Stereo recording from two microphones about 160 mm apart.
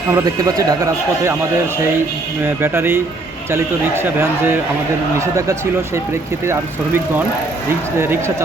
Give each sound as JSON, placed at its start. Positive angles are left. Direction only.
{"t": 0.1, "sound": "speech", "side_deg": -20}
{"t": 2.4, "sound": "speech", "side_deg": -15}
{"t": 6.4, "sound": "speech", "side_deg": -15}